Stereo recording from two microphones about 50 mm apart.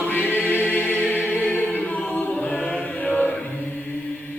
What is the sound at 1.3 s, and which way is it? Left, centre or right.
Choir, left.